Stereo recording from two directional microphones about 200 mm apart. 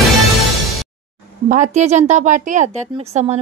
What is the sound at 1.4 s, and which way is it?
A woman's voice, 40° right (ahead or behind).